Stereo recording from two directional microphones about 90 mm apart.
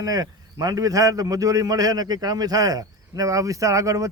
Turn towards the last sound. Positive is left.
turn(degrees=-40)  # may be behind; listen again after turning